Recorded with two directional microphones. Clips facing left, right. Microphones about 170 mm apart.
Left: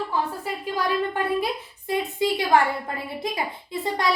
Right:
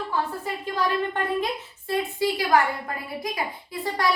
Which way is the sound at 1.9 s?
20° left (ahead or behind).